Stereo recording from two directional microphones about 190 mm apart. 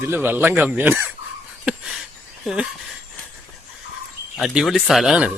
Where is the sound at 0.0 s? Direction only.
10° right (ahead or behind).